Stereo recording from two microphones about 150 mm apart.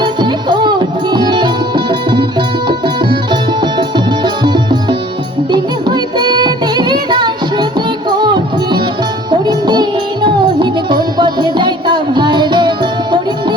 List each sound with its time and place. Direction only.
0.0 s music: 30° right (ahead or behind)